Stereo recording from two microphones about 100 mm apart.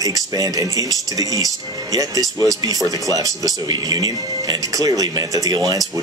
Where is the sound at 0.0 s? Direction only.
35° right (ahead or behind).